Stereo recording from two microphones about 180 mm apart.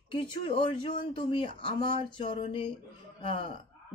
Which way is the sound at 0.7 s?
25° left (ahead or behind).